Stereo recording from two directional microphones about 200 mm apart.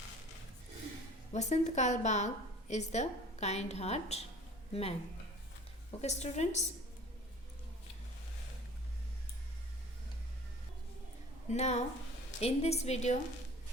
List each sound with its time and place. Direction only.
1.3 s a woman's voice: 35° left (ahead or behind)
6.0 s a woman's voice: 35° left (ahead or behind)
11.4 s a woman's voice: 35° left (ahead or behind)